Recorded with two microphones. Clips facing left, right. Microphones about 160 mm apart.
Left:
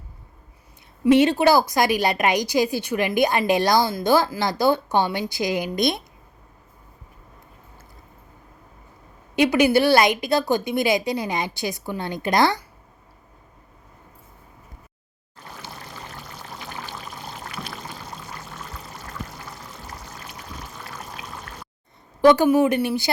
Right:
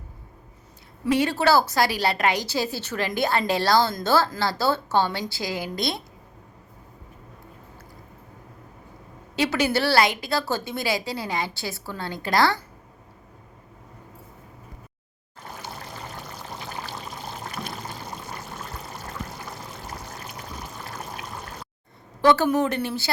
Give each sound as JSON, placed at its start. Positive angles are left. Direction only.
{"t": 1.0, "sound": "a woman's voice", "side_deg": 20}
{"t": 9.3, "sound": "a woman's voice", "side_deg": 15}
{"t": 22.2, "sound": "a woman's voice", "side_deg": 15}